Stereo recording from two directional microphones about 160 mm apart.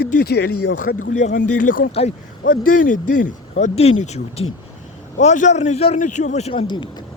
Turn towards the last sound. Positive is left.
turn(degrees=30)  # may be behind; listen again after turning